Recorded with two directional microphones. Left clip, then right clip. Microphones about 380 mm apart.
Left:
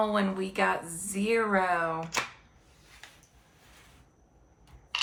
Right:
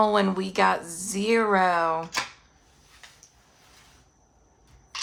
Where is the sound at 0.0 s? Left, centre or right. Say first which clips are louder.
Right 6 dB; centre.